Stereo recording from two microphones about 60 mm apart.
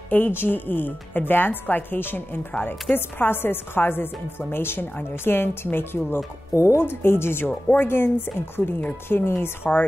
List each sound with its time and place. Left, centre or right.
0.1 s speech: left
6.5 s speech: left
6.8 s speech: left